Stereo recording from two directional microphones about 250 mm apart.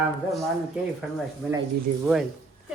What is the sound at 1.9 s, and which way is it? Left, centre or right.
Speech, right.